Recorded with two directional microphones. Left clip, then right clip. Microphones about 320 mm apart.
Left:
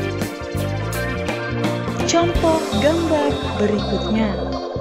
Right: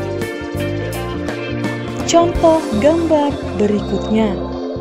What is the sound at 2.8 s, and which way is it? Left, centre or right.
A woman's voice, centre.